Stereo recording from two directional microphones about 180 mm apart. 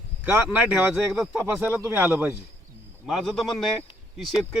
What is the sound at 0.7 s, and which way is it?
Speech, centre (ahead or behind).